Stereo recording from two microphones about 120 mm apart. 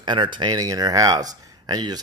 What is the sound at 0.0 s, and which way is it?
Speech, 40° right (ahead or behind).